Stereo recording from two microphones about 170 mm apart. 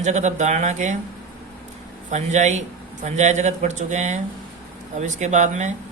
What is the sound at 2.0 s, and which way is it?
A man's voice, 45° right (ahead or behind).